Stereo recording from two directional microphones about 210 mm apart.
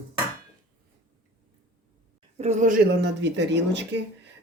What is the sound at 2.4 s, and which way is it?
Speech, 35° right (ahead or behind).